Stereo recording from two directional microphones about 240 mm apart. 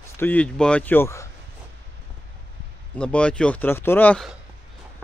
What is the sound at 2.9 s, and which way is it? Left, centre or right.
Speech, centre.